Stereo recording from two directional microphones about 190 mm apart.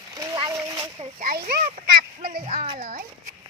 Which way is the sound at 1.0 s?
45° right (ahead or behind).